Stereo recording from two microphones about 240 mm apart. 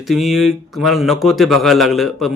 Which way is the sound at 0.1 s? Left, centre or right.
Centre.